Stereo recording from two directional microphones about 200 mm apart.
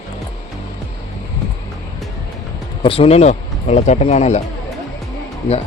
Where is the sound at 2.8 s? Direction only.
30° left (ahead or behind).